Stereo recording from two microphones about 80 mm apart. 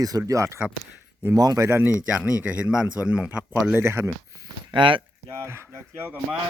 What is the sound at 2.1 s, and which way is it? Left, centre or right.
A man's voice, centre.